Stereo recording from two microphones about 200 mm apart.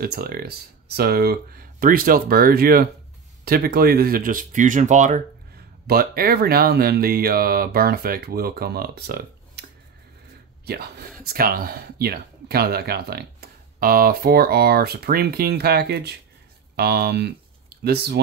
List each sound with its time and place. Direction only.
0.0 s speech: 50° right (ahead or behind)